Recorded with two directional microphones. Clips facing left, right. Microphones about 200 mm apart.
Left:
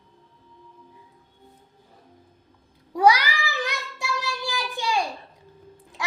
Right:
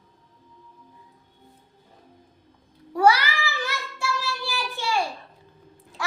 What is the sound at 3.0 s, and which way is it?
Child singing, 15° left (ahead or behind).